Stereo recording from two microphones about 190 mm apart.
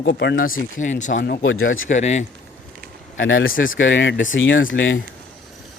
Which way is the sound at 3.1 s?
90° left.